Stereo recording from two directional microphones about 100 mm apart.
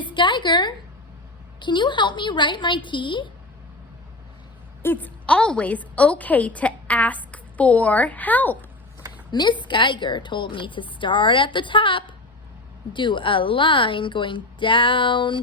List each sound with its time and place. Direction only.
0.0 s a woman's voice: 50° left (ahead or behind)
4.8 s a woman's voice: 20° left (ahead or behind)
9.3 s a woman's voice: 50° left (ahead or behind)